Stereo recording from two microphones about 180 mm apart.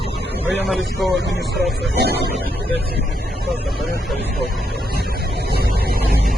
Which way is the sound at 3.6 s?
Centre (ahead or behind).